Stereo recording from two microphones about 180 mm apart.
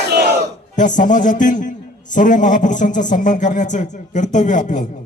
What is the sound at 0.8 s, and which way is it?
A man's voice, 45° left (ahead or behind).